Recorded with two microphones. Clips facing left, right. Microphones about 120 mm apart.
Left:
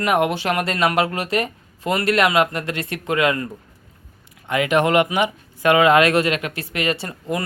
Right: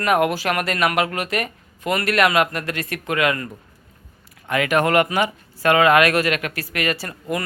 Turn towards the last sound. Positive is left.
turn(degrees=25)  # may be behind; listen again after turning